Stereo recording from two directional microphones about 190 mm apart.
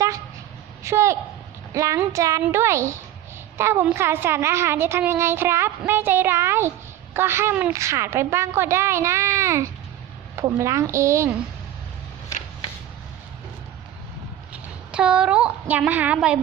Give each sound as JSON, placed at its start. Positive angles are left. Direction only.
{"t": 0.8, "sound": "a woman's voice", "side_deg": -15}
{"t": 14.5, "sound": "a woman's voice", "side_deg": -5}